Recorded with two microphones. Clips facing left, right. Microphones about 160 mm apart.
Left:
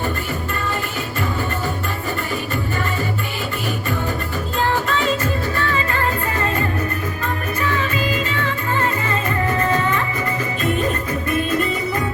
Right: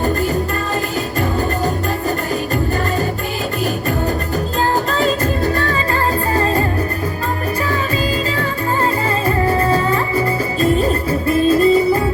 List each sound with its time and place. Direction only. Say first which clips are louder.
1.2 s music: right 5 dB; 40° right (ahead or behind)
4.7 s music: right 3 dB; 40° right (ahead or behind)